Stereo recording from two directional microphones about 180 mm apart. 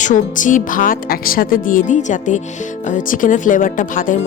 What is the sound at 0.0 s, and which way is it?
Speech, 45° left (ahead or behind).